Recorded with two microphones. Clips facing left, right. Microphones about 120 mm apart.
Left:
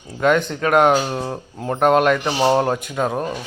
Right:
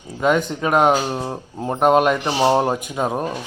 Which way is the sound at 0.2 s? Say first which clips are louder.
Left 1 dB; 10° right (ahead or behind).